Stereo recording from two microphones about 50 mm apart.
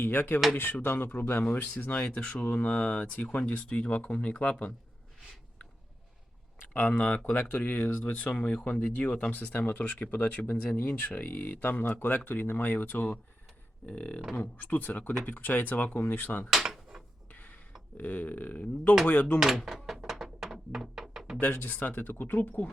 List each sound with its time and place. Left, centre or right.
0.0 s speech: left
6.7 s speech: left
13.8 s speech: left
16.5 s drawer open or close: centre
17.3 s a sound: left
17.9 s speech: left
19.9 s music: centre
21.6 s speech: left